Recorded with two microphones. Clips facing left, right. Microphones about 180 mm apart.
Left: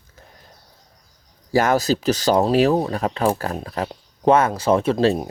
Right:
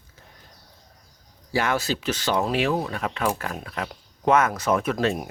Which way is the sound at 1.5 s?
40° left (ahead or behind).